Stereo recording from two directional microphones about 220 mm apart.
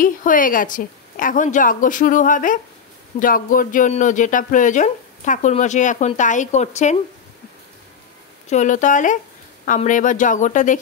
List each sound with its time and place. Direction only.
0.0 s speech: 40° left (ahead or behind)
8.5 s speech: 35° left (ahead or behind)